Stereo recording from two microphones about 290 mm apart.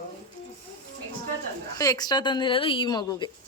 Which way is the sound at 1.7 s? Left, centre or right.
Centre.